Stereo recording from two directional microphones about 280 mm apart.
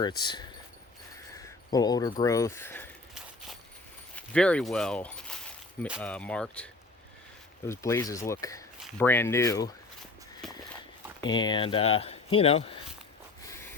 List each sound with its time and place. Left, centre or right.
0.0 s speech: centre
4.1 s speech: centre
7.7 s speech: centre
10.4 s walk: centre
11.2 s speech: centre